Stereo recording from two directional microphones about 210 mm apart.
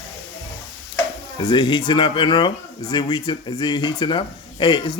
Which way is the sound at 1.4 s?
20° left (ahead or behind).